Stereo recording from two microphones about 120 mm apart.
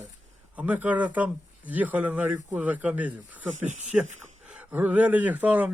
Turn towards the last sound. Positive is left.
turn(degrees=-15)  # may be behind; listen again after turning